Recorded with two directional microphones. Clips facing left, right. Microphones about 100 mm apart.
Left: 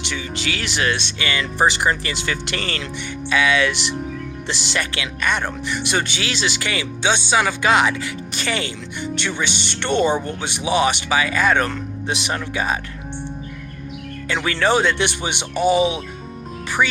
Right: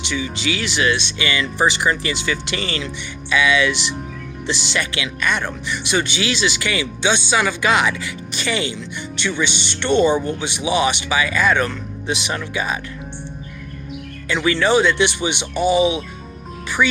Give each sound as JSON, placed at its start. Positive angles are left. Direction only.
{"t": 0.0, "sound": "speech", "side_deg": 50}
{"t": 14.3, "sound": "speech", "side_deg": 45}